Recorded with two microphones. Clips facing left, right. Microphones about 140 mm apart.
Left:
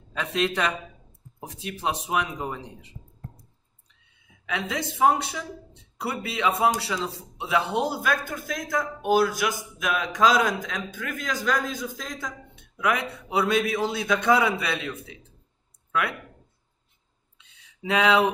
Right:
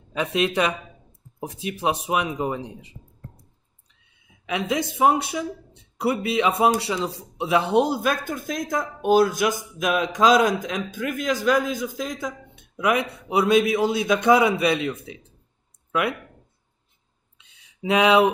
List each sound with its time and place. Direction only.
0.1 s a man's voice: 15° right (ahead or behind)
4.5 s a man's voice: 15° right (ahead or behind)
17.4 s a sound: 15° right (ahead or behind)